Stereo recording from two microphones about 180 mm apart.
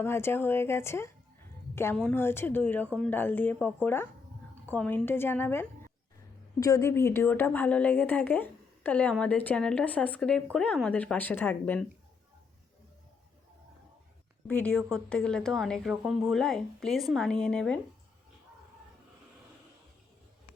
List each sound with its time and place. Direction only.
0.0 s a woman's voice: 15° left (ahead or behind)
14.4 s a woman's voice: 5° left (ahead or behind)